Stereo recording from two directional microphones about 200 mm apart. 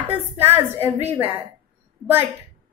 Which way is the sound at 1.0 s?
10° right (ahead or behind).